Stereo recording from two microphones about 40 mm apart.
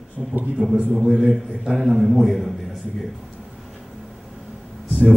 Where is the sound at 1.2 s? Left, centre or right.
Centre.